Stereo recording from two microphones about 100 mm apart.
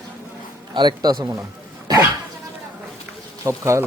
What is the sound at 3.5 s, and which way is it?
Speech, 30° right (ahead or behind).